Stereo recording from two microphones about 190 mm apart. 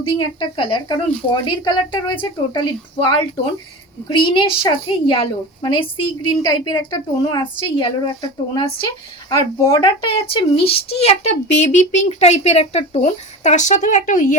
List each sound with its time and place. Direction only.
0.0 s speech: 25° left (ahead or behind); by 14.3 s 40° left (ahead or behind)